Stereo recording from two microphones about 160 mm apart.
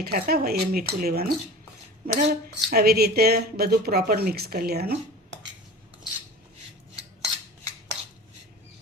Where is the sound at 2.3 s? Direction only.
75° right (ahead or behind).